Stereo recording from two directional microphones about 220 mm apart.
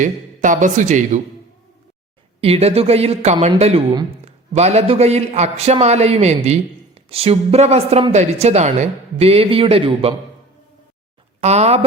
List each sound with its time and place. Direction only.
0.0 s a man's voice: 35° right (ahead or behind)
2.4 s a man's voice: 25° right (ahead or behind)
11.3 s speech: 30° right (ahead or behind)